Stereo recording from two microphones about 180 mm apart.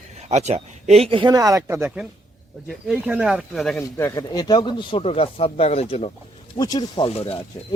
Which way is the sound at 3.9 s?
15° left (ahead or behind).